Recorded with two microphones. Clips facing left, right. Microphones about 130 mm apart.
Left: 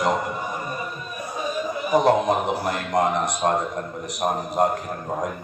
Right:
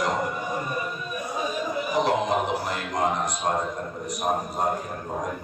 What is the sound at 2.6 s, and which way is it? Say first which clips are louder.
Speech: left 4 dB; 65° left (ahead or behind).